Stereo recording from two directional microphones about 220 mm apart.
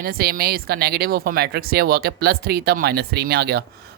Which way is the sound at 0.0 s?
45° right (ahead or behind).